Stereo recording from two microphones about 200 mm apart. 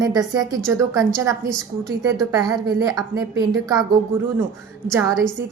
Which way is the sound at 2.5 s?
20° right (ahead or behind).